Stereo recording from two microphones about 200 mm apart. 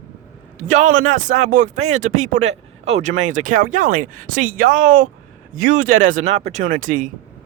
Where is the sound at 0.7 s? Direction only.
40° right (ahead or behind).